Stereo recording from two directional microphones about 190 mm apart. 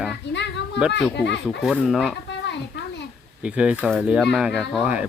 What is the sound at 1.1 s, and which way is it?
Speech, 65° left (ahead or behind).